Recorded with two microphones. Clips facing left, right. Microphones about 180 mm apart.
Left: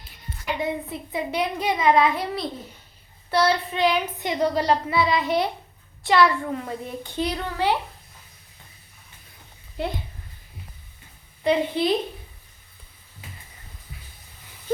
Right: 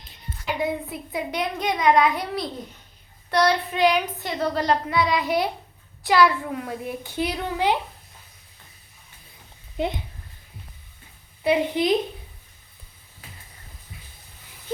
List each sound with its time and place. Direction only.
0.9 s a woman's voice: centre (ahead or behind)
4.2 s a woman's voice: 15° left (ahead or behind); by 7.8 s 15° right (ahead or behind)
9.8 s a woman's voice: 15° right (ahead or behind)
11.4 s a woman's voice: 10° right (ahead or behind)